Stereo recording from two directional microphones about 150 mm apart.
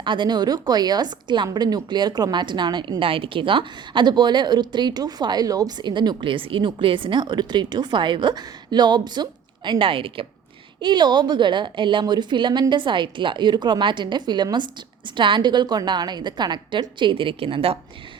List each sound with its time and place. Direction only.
0.0 s a woman's voice: 30° right (ahead or behind)